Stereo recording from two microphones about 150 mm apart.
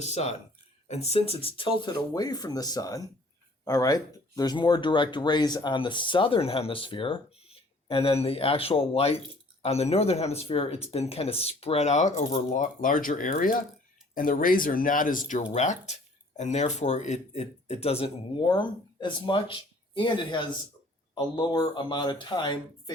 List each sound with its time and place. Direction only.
0.0 s speech: 45° left (ahead or behind); by 22.5 s 30° left (ahead or behind)